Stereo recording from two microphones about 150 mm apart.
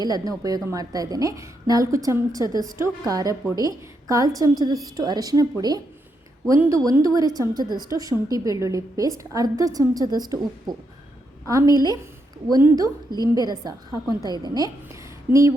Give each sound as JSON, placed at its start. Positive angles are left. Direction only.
{"t": 0.0, "sound": "a woman's voice", "side_deg": -25}